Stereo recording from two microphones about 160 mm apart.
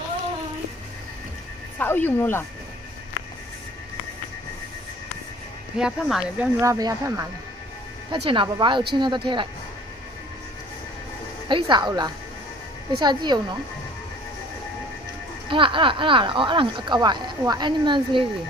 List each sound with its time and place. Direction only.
1.8 s speech: 10° left (ahead or behind)
5.7 s speech: centre (ahead or behind)
6.6 s speech: 20° right (ahead or behind)
8.1 s speech: 30° right (ahead or behind)
11.4 s speech: 30° right (ahead or behind)
15.4 s speech: 30° right (ahead or behind)